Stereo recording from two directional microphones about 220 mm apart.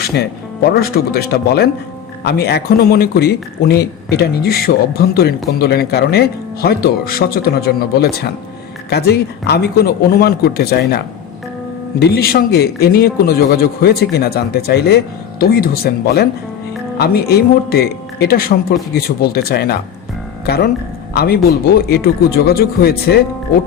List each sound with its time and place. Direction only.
0.0 s speech: 45° left (ahead or behind)